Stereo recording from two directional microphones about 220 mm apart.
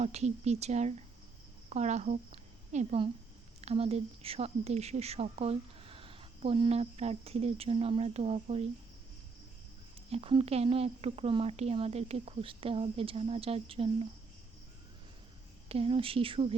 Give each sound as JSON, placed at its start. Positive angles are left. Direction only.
{"t": 0.0, "sound": "a woman's voice", "side_deg": -30}
{"t": 10.1, "sound": "speech", "side_deg": -25}
{"t": 15.7, "sound": "speech", "side_deg": -25}